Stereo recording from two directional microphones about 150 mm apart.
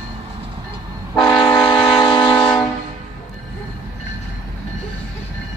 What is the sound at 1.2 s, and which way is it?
Train, 5° left (ahead or behind).